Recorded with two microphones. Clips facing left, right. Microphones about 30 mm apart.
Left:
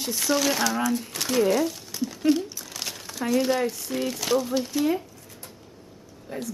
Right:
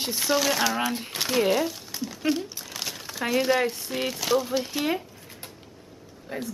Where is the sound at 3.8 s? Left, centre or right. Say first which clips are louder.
Left 1 dB; centre.